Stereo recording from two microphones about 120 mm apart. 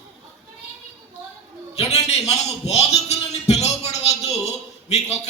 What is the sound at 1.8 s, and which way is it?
Speech, 65° left (ahead or behind).